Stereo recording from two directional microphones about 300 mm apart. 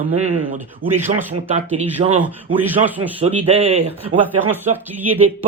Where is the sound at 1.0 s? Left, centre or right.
Centre.